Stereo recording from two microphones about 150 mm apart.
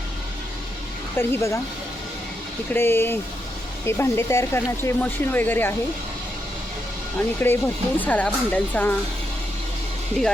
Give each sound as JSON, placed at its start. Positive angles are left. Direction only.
{"t": 1.1, "sound": "speech", "side_deg": 15}
{"t": 2.7, "sound": "speech", "side_deg": 15}
{"t": 7.3, "sound": "speech", "side_deg": 15}